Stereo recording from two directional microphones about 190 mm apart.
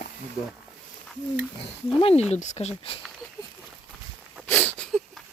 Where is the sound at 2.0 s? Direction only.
35° left (ahead or behind).